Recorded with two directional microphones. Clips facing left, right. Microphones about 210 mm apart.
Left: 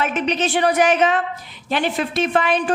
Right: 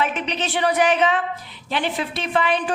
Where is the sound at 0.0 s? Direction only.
45° left (ahead or behind).